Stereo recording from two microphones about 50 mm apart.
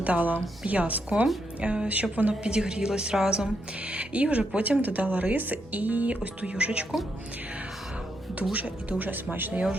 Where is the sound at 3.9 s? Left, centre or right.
Right.